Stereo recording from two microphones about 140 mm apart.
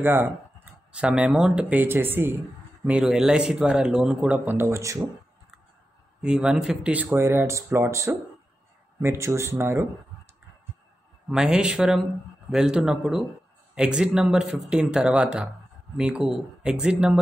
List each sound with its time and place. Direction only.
0.0 s speech: 15° right (ahead or behind)
3.0 s speech: 5° right (ahead or behind); by 5.0 s 20° right (ahead or behind)
6.2 s speech: 5° right (ahead or behind)
11.2 s speech: 5° right (ahead or behind)